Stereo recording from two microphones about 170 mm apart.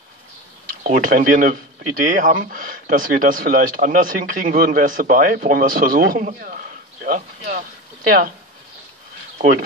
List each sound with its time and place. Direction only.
0.8 s speech: 50° right (ahead or behind)
9.4 s speech: 55° right (ahead or behind)